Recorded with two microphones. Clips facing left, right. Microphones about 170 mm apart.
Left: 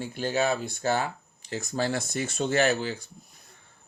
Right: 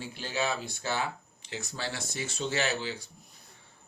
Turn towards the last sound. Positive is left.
turn(degrees=50)  # may be behind; listen again after turning